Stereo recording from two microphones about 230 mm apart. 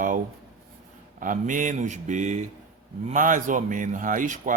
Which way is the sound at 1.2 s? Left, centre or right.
Right.